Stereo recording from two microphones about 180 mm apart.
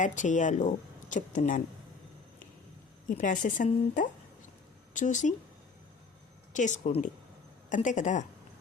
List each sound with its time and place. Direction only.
0.0 s a woman's voice: 45° left (ahead or behind)
3.1 s a woman's voice: 45° left (ahead or behind)
6.5 s a woman's voice: 45° left (ahead or behind)